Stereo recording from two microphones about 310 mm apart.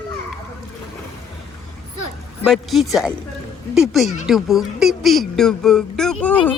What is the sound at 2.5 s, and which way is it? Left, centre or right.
Speech, centre.